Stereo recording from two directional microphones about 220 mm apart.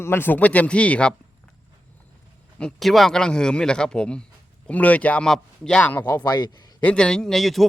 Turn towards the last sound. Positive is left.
turn(degrees=0)  # may be behind; listen again after turning